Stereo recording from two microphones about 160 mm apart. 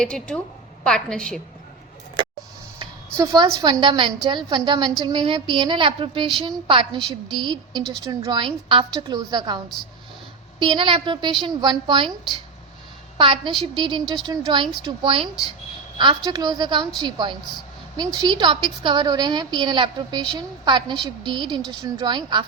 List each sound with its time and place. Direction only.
0.0 s a woman's voice: 5° left (ahead or behind)
2.7 s a woman's voice: 25° right (ahead or behind)
10.6 s a woman's voice: 30° right (ahead or behind)